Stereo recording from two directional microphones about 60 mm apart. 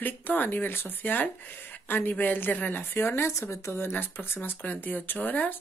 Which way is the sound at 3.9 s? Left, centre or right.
Left.